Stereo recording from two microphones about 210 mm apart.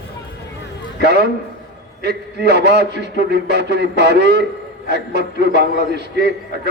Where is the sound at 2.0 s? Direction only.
50° right (ahead or behind).